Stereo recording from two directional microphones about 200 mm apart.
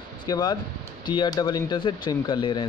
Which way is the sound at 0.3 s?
20° left (ahead or behind).